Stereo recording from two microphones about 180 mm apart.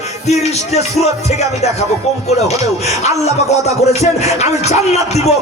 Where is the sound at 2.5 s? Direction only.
40° left (ahead or behind).